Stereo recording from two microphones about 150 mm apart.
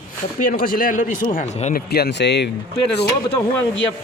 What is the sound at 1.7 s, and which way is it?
Speech, 90° left.